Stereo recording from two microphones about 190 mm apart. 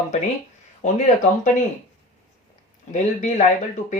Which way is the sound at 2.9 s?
40° left (ahead or behind).